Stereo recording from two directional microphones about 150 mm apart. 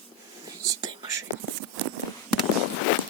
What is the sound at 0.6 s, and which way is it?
Whispering, 25° right (ahead or behind).